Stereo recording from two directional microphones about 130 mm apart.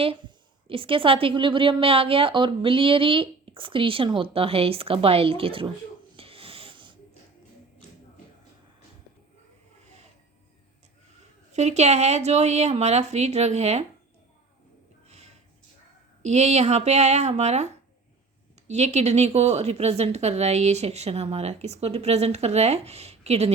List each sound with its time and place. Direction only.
0.0 s a woman's voice: 40° right (ahead or behind)
6.1 s a sound: 45° right (ahead or behind)
11.5 s speech: 60° right (ahead or behind)
15.0 s a sound: 55° right (ahead or behind)
16.2 s speech: 60° right (ahead or behind)
18.7 s speech: 60° right (ahead or behind)